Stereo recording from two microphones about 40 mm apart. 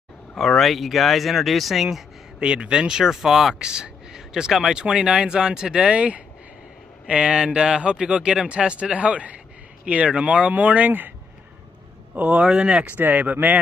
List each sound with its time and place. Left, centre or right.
0.4 s speech: centre
2.4 s speech: right; by 3.5 s centre
3.5 s speech: right
4.7 s speech: centre
10.5 s speech: right
10.9 s speech: right
12.2 s speech: right
12.4 s speech: right
13.0 s speech: right